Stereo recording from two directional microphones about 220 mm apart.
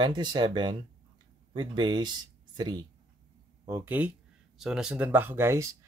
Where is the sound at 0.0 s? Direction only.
20° right (ahead or behind).